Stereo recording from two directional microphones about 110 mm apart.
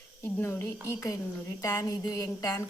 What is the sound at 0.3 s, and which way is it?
A woman's voice, 20° left (ahead or behind).